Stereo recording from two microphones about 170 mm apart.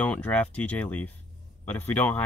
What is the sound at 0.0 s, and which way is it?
Speech, 10° left (ahead or behind).